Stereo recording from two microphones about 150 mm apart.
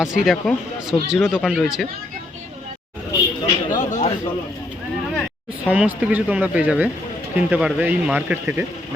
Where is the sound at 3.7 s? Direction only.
55° left (ahead or behind).